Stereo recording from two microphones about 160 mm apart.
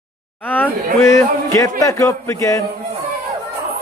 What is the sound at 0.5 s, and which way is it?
A man's voice, 10° left (ahead or behind).